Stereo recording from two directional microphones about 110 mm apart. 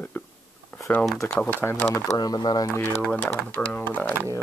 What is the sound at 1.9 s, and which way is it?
Speech, 35° left (ahead or behind).